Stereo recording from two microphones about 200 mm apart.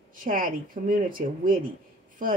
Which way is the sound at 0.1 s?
45° right (ahead or behind).